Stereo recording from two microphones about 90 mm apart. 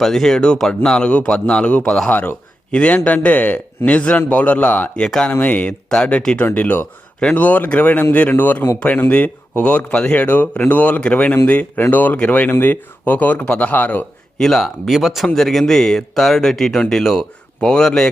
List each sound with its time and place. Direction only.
0.0 s speech: 5° left (ahead or behind)
14.3 s speech: 5° left (ahead or behind)